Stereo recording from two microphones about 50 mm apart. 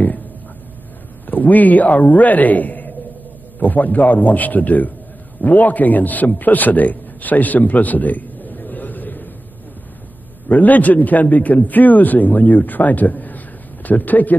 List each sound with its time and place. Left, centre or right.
1.2 s a man's voice: left
10.5 s a man's voice: left